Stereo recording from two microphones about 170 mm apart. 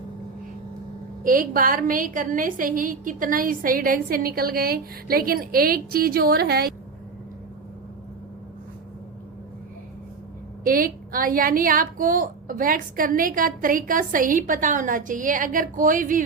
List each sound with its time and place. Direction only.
1.2 s a woman's voice: 55° right (ahead or behind)
10.6 s a woman's voice: 55° right (ahead or behind)